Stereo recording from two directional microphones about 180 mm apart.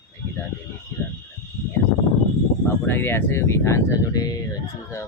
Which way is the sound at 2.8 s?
10° left (ahead or behind).